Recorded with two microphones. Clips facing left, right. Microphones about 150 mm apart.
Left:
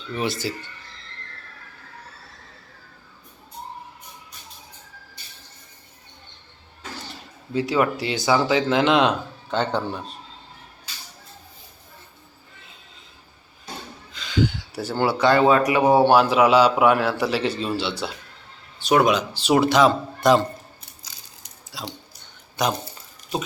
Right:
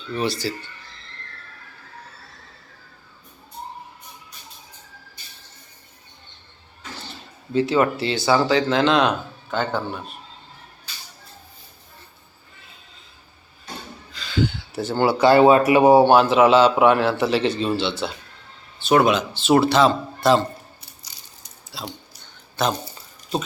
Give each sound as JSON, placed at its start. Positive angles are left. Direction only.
{"t": 0.1, "sound": "speech", "side_deg": 15}
{"t": 7.5, "sound": "speech", "side_deg": 10}
{"t": 14.1, "sound": "a sound", "side_deg": 20}
{"t": 15.3, "sound": "speech", "side_deg": -25}
{"t": 15.9, "sound": "speech", "side_deg": 0}
{"t": 21.7, "sound": "speech", "side_deg": 10}